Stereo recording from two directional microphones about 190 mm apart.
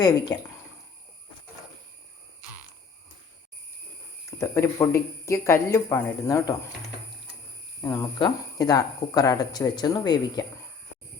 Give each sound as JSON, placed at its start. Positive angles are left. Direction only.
{"t": 0.3, "sound": "speech", "side_deg": 10}
{"t": 4.3, "sound": "speech", "side_deg": 15}
{"t": 7.8, "sound": "speech", "side_deg": 15}